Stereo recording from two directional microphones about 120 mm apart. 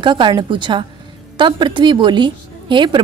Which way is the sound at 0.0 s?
40° right (ahead or behind).